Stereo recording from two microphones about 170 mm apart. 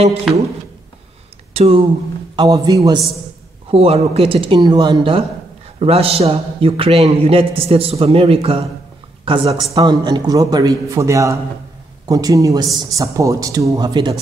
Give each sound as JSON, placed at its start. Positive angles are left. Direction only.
{"t": 0.3, "sound": "speech", "side_deg": 0}
{"t": 1.5, "sound": "speech", "side_deg": -35}
{"t": 2.3, "sound": "speech", "side_deg": -20}
{"t": 3.7, "sound": "a man's voice", "side_deg": -35}